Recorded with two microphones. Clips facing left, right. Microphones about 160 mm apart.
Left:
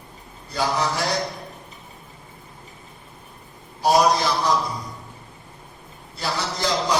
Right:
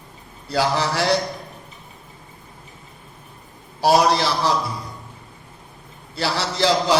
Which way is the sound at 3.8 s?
80° right.